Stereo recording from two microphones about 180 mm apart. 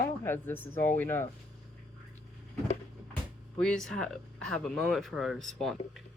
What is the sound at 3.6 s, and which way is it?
Speech, 5° left (ahead or behind).